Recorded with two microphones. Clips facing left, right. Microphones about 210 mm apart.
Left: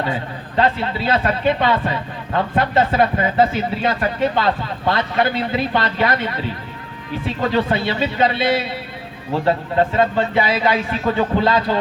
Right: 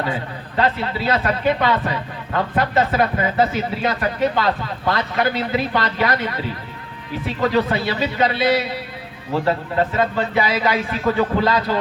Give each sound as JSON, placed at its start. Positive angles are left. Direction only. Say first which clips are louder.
{"t": 0.0, "sound": "a man's voice", "louder": "left 1 dB", "side_deg": 25}